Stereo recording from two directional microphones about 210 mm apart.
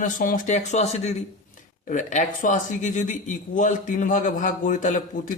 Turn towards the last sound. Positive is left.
turn(degrees=40)  # may be behind; listen again after turning